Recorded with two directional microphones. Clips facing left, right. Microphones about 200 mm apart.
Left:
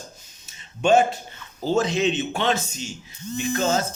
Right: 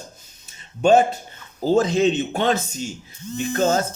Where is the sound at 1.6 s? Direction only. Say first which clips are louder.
Right 4 dB; 40° right (ahead or behind).